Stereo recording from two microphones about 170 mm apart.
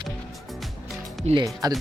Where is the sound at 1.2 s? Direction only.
30° right (ahead or behind).